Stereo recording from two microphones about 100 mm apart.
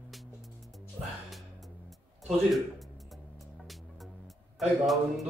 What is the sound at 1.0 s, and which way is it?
Music, 55° right (ahead or behind).